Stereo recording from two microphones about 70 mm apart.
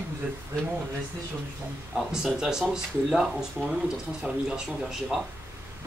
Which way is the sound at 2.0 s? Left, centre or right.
Centre.